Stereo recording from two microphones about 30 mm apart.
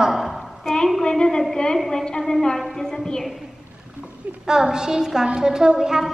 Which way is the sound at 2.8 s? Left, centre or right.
Left.